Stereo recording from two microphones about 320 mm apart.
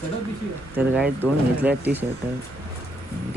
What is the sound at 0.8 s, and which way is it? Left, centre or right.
Speech, centre.